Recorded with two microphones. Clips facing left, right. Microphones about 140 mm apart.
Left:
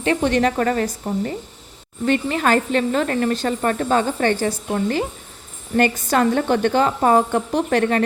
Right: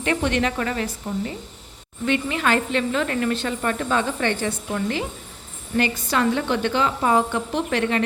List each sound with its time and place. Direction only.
0.0 s a woman's voice: 35° left (ahead or behind)